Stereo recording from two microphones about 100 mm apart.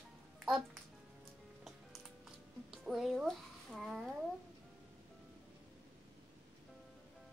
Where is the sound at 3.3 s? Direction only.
Centre (ahead or behind).